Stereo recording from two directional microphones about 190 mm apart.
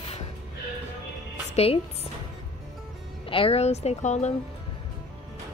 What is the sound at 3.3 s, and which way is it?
A woman's voice, 30° left (ahead or behind).